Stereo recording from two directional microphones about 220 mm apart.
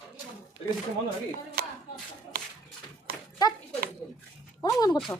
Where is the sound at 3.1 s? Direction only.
45° right (ahead or behind).